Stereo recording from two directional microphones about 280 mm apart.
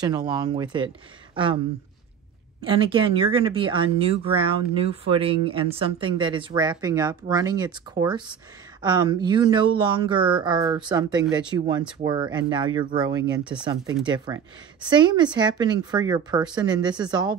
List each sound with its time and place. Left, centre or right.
0.0 s speech: centre
2.6 s speech: centre
13.4 s speech: centre
14.0 s speech: centre